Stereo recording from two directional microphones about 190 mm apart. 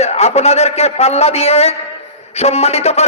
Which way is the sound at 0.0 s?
35° left (ahead or behind).